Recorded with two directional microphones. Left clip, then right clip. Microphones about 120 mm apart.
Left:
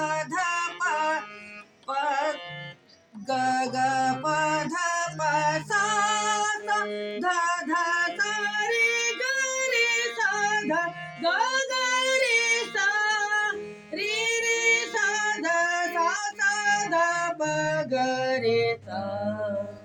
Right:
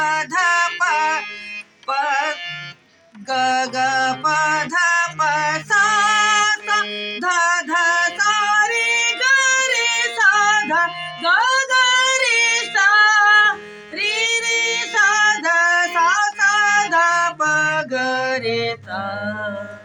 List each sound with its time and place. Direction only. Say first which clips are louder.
0.0 s music: right 9 dB; 25° left (ahead or behind)
3.2 s mantra: right 7 dB; 15° left (ahead or behind)
4.7 s music: right 10 dB; 10° left (ahead or behind)
5.6 s female singing: right 9 dB; 10° left (ahead or behind)
7.2 s music: right 8 dB; 25° left (ahead or behind)
14.0 s female singing: right 7 dB; 15° left (ahead or behind)